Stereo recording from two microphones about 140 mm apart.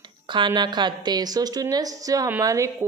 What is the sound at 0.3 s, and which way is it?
Speech, 35° right (ahead or behind).